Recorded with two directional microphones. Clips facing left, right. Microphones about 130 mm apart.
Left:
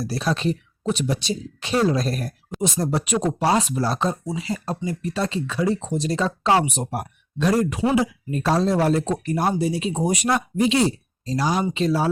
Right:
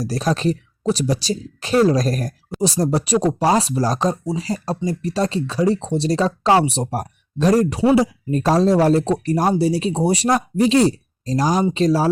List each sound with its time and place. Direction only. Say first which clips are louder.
0.0 s speech: right 3 dB; 40° right (ahead or behind)